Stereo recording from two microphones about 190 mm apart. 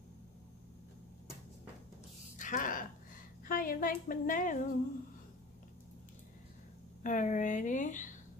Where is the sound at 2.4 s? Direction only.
45° left (ahead or behind).